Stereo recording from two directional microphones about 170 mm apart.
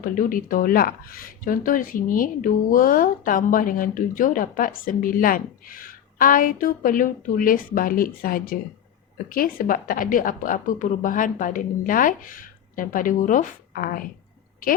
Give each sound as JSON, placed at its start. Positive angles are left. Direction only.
{"t": 0.0, "sound": "a woman's voice", "side_deg": 55}